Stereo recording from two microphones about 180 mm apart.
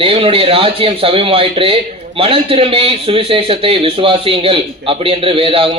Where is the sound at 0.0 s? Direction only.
30° right (ahead or behind).